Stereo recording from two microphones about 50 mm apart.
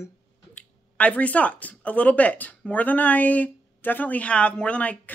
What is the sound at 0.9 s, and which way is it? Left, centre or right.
Speech, left.